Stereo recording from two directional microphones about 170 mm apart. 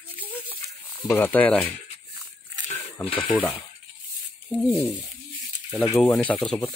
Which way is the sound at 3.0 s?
30° left (ahead or behind).